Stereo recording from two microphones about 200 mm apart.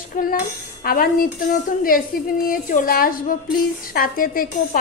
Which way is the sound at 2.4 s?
45° left (ahead or behind).